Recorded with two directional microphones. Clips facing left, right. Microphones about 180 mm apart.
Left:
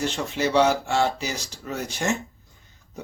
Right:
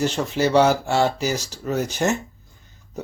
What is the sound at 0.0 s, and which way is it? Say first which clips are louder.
Speech: right 4 dB; 40° right (ahead or behind).